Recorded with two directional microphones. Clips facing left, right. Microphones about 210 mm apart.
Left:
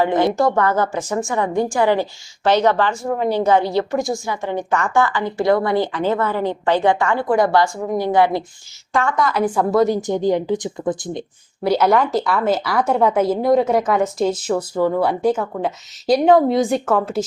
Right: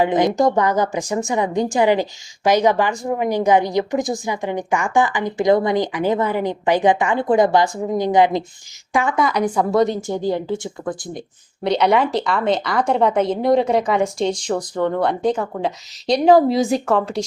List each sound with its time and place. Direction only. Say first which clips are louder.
0.0 s a woman's voice: even; 15° right (ahead or behind)
9.1 s a woman's voice: even; centre (ahead or behind)
10.0 s speech: left 3 dB; 20° left (ahead or behind)
11.6 s a woman's voice: left 1 dB; 5° left (ahead or behind)